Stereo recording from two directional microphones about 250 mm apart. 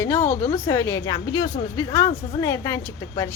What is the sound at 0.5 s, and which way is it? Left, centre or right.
A woman's voice, centre.